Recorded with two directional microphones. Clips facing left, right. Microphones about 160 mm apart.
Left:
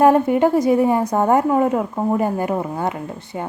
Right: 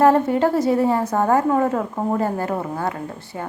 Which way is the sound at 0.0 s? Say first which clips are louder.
Left 2 dB; 15° left (ahead or behind).